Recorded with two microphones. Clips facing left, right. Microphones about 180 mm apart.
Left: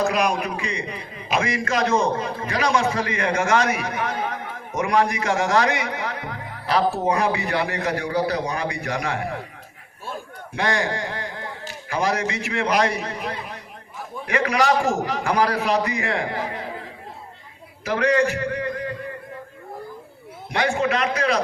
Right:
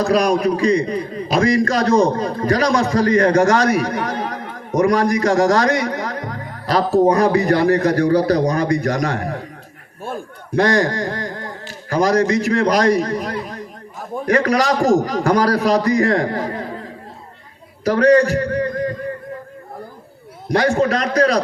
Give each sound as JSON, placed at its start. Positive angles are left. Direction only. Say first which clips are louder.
{"t": 0.0, "sound": "a man's voice", "louder": "right 6 dB", "side_deg": -35}
{"t": 17.8, "sound": "a man's voice", "louder": "right 7 dB", "side_deg": -40}
{"t": 20.5, "sound": "a man's voice", "louder": "right 6 dB", "side_deg": -40}